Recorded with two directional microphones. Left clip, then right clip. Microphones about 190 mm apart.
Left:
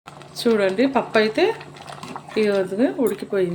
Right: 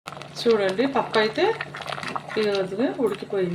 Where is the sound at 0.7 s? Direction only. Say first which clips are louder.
Left 3 dB; 25° left (ahead or behind).